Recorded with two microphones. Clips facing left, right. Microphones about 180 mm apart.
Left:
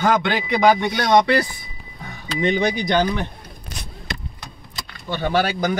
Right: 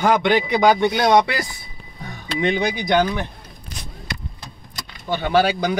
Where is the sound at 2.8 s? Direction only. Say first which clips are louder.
Right 1 dB; 10° right (ahead or behind).